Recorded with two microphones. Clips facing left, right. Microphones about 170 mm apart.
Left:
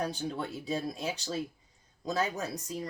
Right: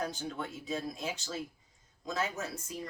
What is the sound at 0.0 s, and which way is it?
Speech, 30° left (ahead or behind).